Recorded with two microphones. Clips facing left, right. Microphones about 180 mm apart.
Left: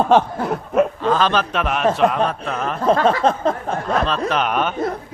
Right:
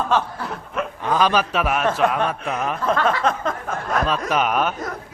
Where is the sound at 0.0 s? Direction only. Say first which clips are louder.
Left 7 dB; 55° left (ahead or behind).